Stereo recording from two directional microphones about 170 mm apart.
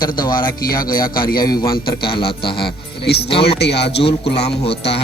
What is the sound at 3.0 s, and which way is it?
A man's voice, 80° left.